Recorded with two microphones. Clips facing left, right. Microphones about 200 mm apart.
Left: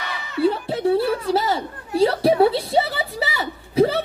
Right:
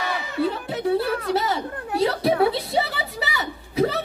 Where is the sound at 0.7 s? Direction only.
30° left (ahead or behind).